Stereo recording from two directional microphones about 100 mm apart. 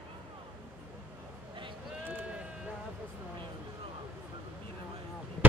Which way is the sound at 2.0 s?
20° right (ahead or behind).